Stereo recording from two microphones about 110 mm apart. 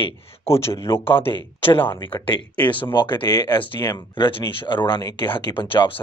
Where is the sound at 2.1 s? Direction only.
15° left (ahead or behind).